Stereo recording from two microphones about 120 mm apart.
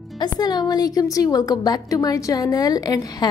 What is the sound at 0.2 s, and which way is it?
A woman's voice, 35° left (ahead or behind).